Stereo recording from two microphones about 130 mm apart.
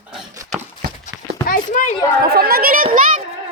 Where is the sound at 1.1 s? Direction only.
85° left.